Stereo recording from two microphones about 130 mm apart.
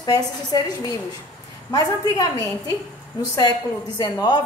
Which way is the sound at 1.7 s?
25° left (ahead or behind).